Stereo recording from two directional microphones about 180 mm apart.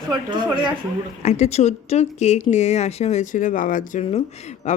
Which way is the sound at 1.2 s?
40° left (ahead or behind).